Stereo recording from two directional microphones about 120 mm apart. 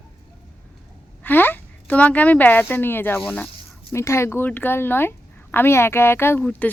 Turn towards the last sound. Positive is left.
turn(degrees=10)  # may be behind; listen again after turning